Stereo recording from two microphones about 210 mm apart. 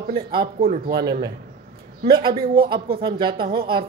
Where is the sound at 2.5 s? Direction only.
25° right (ahead or behind).